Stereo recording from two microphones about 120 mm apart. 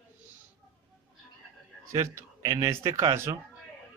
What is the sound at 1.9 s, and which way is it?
Speech, 25° right (ahead or behind).